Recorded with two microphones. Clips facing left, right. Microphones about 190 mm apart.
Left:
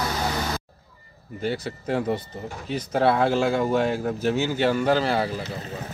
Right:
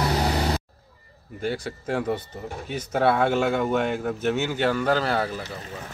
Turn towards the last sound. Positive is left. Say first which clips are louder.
# left 1 dB
turn(degrees=10)  # may be behind; listen again after turning